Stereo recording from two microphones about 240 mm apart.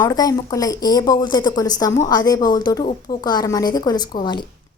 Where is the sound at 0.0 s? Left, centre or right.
Centre.